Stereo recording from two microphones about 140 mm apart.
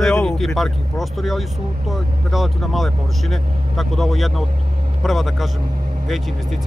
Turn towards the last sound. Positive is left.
turn(degrees=0)  # may be behind; listen again after turning